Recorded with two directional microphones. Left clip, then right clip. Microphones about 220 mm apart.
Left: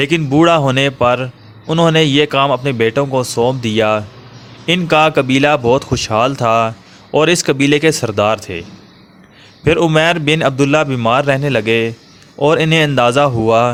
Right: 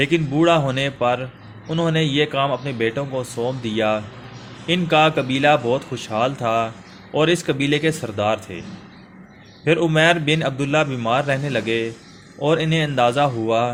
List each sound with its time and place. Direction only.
0.0 s a man's voice: 40° left (ahead or behind)
9.6 s a man's voice: 40° left (ahead or behind)